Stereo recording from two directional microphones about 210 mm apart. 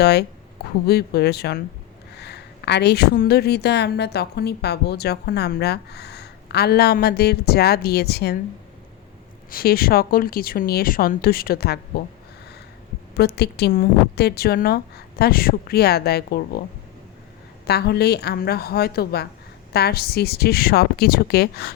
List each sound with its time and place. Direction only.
0.0 s a woman's voice: 50° left (ahead or behind)
9.5 s a woman's voice: 45° left (ahead or behind)
13.1 s a woman's voice: 50° left (ahead or behind)
17.7 s a woman's voice: 50° left (ahead or behind)